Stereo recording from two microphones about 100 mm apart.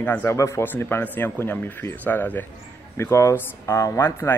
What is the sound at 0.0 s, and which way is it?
Speech, 25° left (ahead or behind).